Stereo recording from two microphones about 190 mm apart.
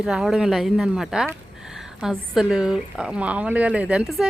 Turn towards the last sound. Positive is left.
turn(degrees=0)  # may be behind; listen again after turning